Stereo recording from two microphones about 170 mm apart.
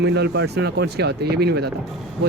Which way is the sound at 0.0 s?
80° right.